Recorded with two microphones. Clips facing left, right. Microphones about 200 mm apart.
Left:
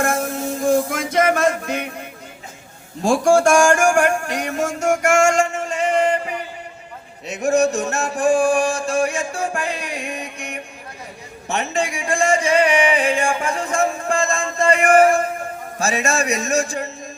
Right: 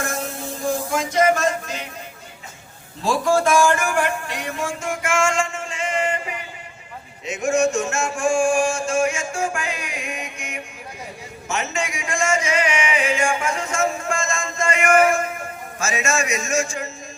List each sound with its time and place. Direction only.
0.0 s music: 55° left (ahead or behind)
3.0 s a man's voice: 50° left (ahead or behind)
4.5 s music: 45° left (ahead or behind)
7.3 s a sound: 35° left (ahead or behind)
14.0 s a man's voice: 35° left (ahead or behind)